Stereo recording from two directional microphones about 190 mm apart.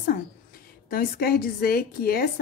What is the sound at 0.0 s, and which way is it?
A woman's voice, 50° left (ahead or behind).